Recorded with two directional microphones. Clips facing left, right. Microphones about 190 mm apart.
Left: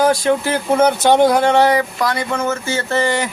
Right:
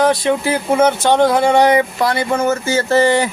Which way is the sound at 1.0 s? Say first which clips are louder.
Left 1 dB; 15° left (ahead or behind).